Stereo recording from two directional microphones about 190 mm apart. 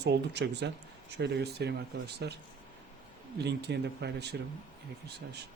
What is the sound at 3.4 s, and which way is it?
Speech, 60° right (ahead or behind).